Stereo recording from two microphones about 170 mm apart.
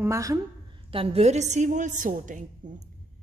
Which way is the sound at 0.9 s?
35° right (ahead or behind).